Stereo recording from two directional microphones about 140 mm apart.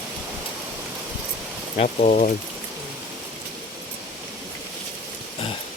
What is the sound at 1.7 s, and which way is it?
Speech, 55° left (ahead or behind).